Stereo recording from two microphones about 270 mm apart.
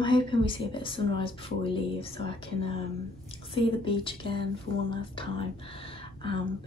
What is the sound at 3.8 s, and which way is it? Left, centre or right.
Speech, centre.